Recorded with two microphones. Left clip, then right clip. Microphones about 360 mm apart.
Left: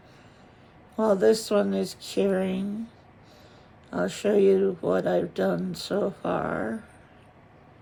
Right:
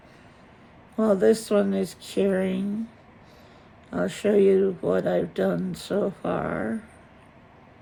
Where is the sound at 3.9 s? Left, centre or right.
Centre.